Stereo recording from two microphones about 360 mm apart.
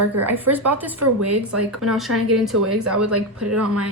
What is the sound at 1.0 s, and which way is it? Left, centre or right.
Speech, right.